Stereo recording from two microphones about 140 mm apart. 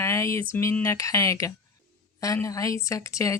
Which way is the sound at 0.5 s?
20° left (ahead or behind).